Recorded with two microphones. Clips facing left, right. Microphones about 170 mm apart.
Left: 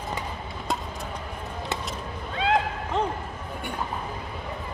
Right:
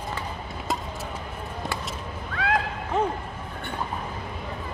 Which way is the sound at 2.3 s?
25° left (ahead or behind).